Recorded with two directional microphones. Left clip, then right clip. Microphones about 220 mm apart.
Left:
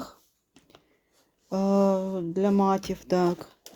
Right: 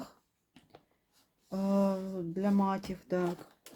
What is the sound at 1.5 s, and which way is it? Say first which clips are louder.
Speech: left 8 dB; 40° left (ahead or behind).